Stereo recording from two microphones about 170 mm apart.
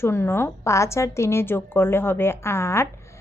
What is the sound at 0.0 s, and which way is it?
A woman's voice, 15° left (ahead or behind).